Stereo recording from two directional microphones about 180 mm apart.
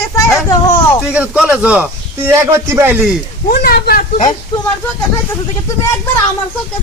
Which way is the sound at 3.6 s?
60° left (ahead or behind).